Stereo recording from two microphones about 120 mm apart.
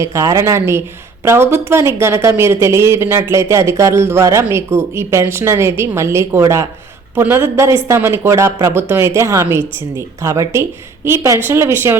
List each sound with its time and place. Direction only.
0.0 s speech: 25° right (ahead or behind)